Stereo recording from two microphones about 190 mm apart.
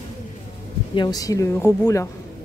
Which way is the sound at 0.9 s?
20° left (ahead or behind).